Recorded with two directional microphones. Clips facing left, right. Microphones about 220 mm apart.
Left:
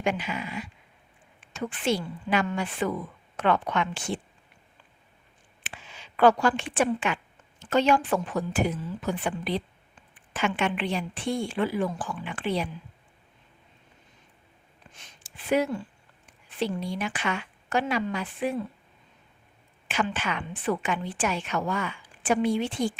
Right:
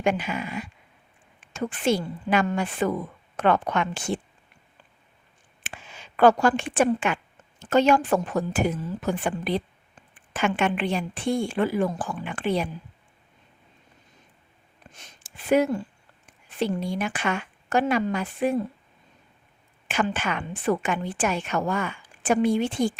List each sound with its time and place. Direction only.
0.0 s a woman's voice: 50° right (ahead or behind)
5.6 s a woman's voice: 50° right (ahead or behind)
14.9 s a woman's voice: 45° right (ahead or behind)
19.9 s a woman's voice: 50° right (ahead or behind)